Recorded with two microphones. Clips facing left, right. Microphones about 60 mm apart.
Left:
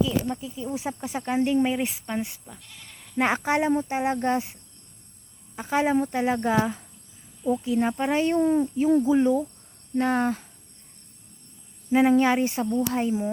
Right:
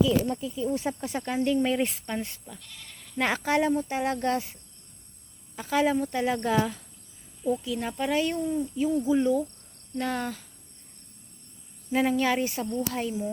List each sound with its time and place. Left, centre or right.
0.3 s speech: centre
1.6 s speech: centre
3.2 s speech: left
5.5 s speech: left
8.4 s speech: left
9.0 s speech: left
11.9 s speech: left